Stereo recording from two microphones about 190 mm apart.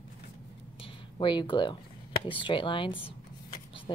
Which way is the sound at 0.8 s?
25° left (ahead or behind).